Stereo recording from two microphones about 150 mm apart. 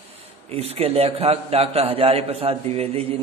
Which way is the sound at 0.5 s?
40° right (ahead or behind).